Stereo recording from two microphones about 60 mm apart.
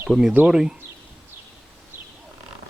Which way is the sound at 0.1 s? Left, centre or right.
Centre.